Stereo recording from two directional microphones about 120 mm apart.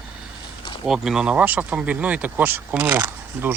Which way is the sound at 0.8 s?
5° right (ahead or behind).